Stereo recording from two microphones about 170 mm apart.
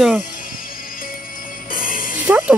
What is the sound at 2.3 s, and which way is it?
Speech, 5° right (ahead or behind).